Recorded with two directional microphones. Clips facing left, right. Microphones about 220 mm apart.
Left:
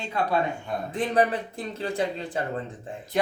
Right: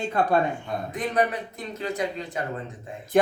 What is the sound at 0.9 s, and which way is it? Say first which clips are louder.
Speech: left 2 dB; 30° left (ahead or behind).